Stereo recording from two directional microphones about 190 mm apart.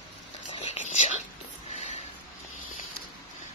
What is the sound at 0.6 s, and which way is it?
Whispering, 35° left (ahead or behind).